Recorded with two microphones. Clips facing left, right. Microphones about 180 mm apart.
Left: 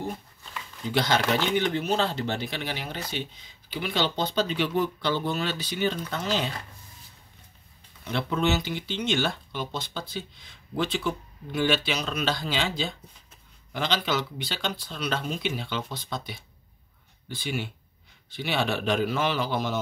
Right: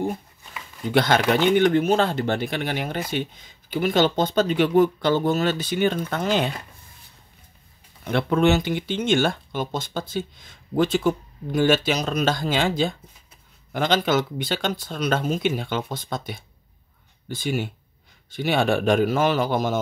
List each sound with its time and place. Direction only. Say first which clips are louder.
0.8 s speech: right 5 dB; 55° right (ahead or behind)
8.0 s speech: right 7 dB; 55° right (ahead or behind)